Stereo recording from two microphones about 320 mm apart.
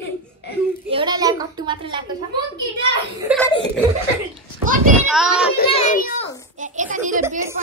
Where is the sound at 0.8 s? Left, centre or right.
Centre.